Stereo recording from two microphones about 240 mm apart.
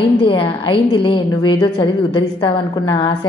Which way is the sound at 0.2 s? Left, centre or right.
Left.